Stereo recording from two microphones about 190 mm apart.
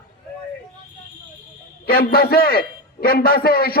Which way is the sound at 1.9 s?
55° left (ahead or behind).